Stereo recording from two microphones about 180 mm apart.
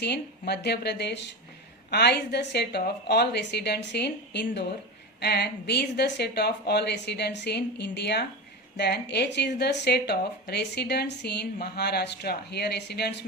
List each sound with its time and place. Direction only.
0.0 s speech: 70° left (ahead or behind)